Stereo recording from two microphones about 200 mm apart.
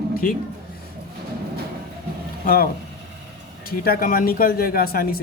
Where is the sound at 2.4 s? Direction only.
45° left (ahead or behind).